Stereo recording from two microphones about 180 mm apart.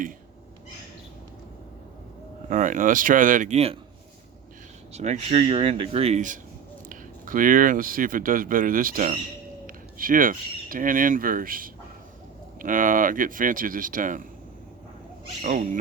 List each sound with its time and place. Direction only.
2.5 s speech: 45° right (ahead or behind)
4.9 s speech: 40° right (ahead or behind)
5.4 s speech: 25° right (ahead or behind); by 14.3 s 50° right (ahead or behind)
15.4 s speech: 45° right (ahead or behind)